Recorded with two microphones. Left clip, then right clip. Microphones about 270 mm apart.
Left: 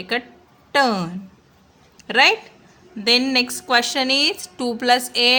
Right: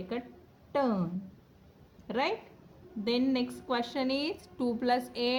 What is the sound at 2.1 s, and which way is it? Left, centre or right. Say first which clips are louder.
A woman's voice: left 16 dB; left.